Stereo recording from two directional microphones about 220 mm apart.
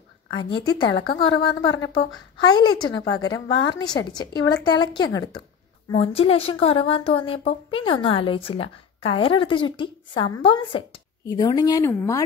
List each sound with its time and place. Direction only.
0.3 s speech: 20° left (ahead or behind)
1.1 s a woman's voice: 55° left (ahead or behind)
2.3 s speech: 20° left (ahead or behind)
3.3 s a woman's voice: 60° left (ahead or behind)
3.7 s speech: 20° left (ahead or behind)